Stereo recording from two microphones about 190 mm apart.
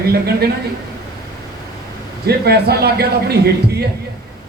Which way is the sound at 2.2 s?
55° right (ahead or behind).